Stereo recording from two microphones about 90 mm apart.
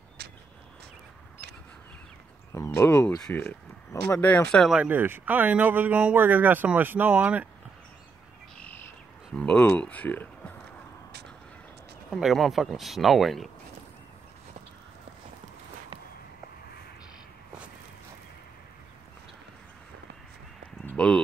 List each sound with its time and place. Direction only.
2.7 s speech: 30° left (ahead or behind)
4.8 s speech: 20° right (ahead or behind)
8.5 s bird: 20° left (ahead or behind)
9.3 s speech: 10° left (ahead or behind)
12.2 s speech: centre (ahead or behind)
20.8 s clip-clop: 15° left (ahead or behind)